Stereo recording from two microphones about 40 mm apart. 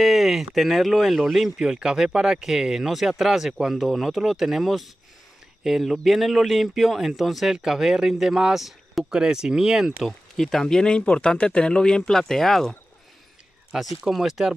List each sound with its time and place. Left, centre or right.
0.0 s speech: centre
1.6 s speech: centre
9.1 s speech: centre
10.0 s speech: centre